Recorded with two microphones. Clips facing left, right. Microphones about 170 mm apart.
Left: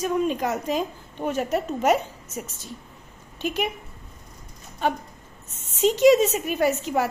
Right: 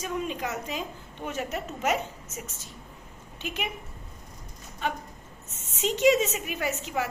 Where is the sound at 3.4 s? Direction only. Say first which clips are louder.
Left 8 dB; 40° left (ahead or behind).